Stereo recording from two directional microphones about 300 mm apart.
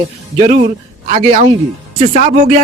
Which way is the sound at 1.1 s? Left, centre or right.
Right.